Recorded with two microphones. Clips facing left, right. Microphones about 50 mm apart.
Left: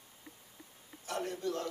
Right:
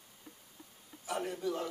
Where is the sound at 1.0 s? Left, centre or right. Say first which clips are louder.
Right 1 dB; centre.